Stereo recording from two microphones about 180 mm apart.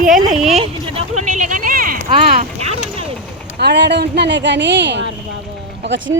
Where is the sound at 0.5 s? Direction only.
35° right (ahead or behind); by 2.1 s 50° right (ahead or behind).